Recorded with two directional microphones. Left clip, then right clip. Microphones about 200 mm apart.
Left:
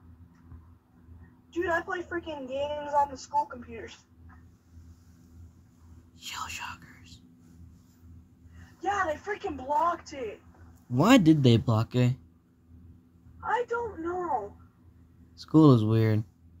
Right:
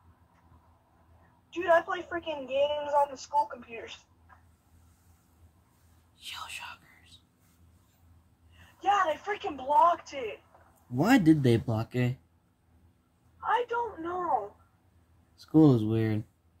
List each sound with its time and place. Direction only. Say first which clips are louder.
1.5 s a woman's voice: right 4 dB; 5° left (ahead or behind)
6.1 s whispering: left 3 dB; 15° left (ahead or behind)
8.5 s a woman's voice: right 3 dB; 5° left (ahead or behind)
11.0 s a woman's voice: left 3 dB; 20° left (ahead or behind)
13.4 s a woman's voice: right 1 dB; 5° left (ahead or behind)
15.4 s speech: left 2 dB; 20° left (ahead or behind)